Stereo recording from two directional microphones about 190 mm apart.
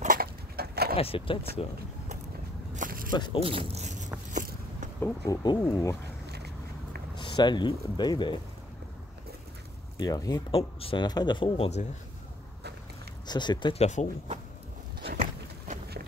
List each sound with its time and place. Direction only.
0.0 s wood: 50° right (ahead or behind)
0.9 s speech: 30° left (ahead or behind)
2.7 s a sound: 45° right (ahead or behind)
3.2 s speech: 25° left (ahead or behind)
3.4 s speech: 30° right (ahead or behind)
4.3 s a sound: 45° right (ahead or behind)
5.0 s speech: 20° left (ahead or behind)
6.3 s walk: 60° right (ahead or behind)
7.2 s speech: 25° left (ahead or behind)
9.9 s speech: 20° left (ahead or behind)
13.3 s speech: 25° left (ahead or behind)
15.0 s a sound: 50° right (ahead or behind)